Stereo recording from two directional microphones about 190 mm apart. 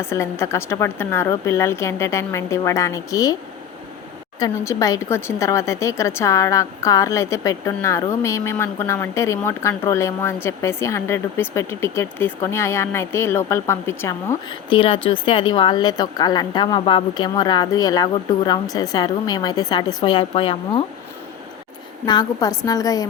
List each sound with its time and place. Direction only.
0.0 s a woman's voice: 15° left (ahead or behind)
4.4 s a woman's voice: 20° left (ahead or behind)
22.0 s a woman's voice: 20° left (ahead or behind)